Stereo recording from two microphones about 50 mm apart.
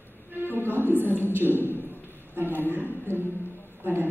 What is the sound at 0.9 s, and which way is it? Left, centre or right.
Speech, left.